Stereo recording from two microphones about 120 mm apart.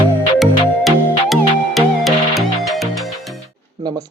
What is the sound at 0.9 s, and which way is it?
Music, centre (ahead or behind).